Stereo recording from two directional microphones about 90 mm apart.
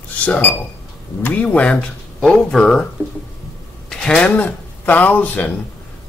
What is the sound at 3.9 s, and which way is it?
Speech, 10° left (ahead or behind).